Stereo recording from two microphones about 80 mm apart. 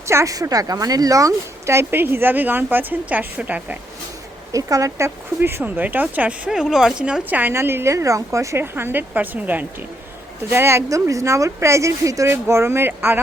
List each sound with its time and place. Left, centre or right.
0.1 s speech: right
0.3 s speech: right; by 3.8 s centre
4.5 s speech: right; by 7.2 s centre
7.3 s a woman's voice: right